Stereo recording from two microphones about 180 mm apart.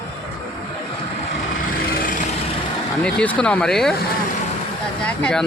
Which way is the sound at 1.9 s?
50° left (ahead or behind).